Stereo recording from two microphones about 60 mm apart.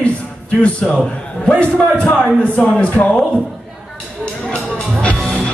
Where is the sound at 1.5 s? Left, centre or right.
Centre.